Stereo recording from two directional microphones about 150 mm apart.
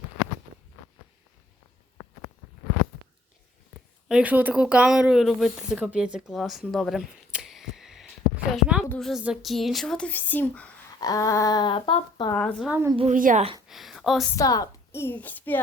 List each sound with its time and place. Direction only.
4.1 s a woman's voice: 10° right (ahead or behind); by 10.7 s 10° left (ahead or behind)
11.0 s speech: 25° left (ahead or behind)
12.3 s speech: 5° left (ahead or behind)
13.1 s a woman's voice: 65° right (ahead or behind)
13.7 s a sound: centre (ahead or behind)
14.3 s speech: 25° left (ahead or behind)